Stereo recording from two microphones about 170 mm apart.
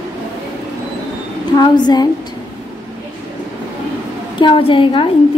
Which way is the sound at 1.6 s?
25° left (ahead or behind).